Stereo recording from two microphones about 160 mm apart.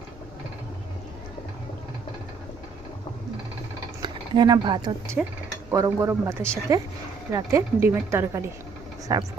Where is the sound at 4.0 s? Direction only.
25° right (ahead or behind).